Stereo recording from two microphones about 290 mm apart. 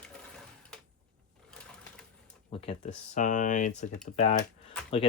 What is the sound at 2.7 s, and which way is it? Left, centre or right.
Speech, left.